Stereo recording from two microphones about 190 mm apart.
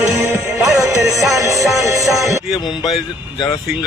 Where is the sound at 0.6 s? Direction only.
Centre (ahead or behind).